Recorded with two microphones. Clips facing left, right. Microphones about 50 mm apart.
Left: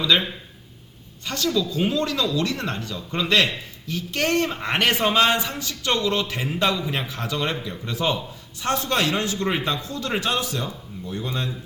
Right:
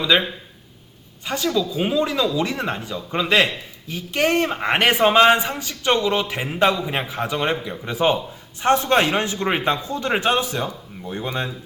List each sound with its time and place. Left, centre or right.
0.0 s speech: centre; by 11.5 s right